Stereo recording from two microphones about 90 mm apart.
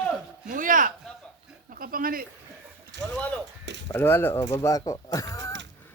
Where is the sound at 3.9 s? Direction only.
25° left (ahead or behind).